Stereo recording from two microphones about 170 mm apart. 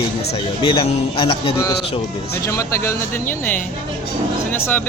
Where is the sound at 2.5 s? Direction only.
15° left (ahead or behind).